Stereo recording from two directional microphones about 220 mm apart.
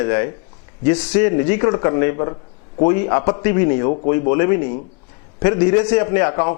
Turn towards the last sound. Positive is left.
turn(degrees=15)  # may be behind; listen again after turning